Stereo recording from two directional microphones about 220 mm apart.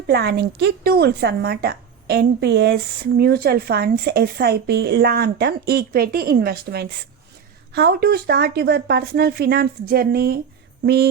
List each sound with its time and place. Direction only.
0.1 s a woman's voice: 50° right (ahead or behind)